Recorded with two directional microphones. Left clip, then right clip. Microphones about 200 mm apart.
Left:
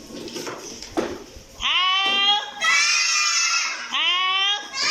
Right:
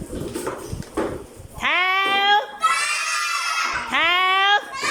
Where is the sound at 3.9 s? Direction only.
60° right (ahead or behind).